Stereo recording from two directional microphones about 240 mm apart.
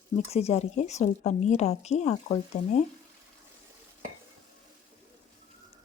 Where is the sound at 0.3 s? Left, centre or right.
Left.